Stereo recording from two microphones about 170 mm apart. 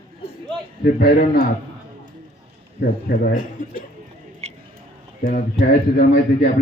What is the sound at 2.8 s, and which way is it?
A man's voice, 60° left (ahead or behind).